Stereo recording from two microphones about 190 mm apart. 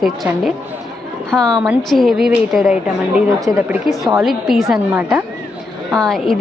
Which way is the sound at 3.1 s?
10° right (ahead or behind).